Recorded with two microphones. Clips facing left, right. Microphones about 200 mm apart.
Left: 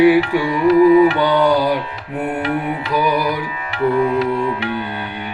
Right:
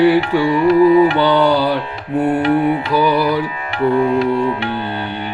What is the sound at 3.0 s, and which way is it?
Music, 15° left (ahead or behind).